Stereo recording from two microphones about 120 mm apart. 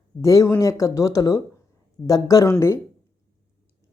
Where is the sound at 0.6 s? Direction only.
25° left (ahead or behind).